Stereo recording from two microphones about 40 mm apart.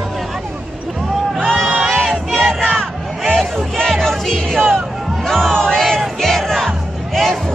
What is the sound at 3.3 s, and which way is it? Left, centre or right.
Speech, centre.